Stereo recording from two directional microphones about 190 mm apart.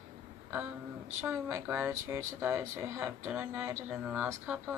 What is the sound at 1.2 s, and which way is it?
Speech, 10° right (ahead or behind).